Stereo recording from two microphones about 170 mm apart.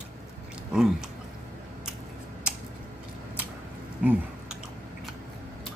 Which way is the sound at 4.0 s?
10° right (ahead or behind).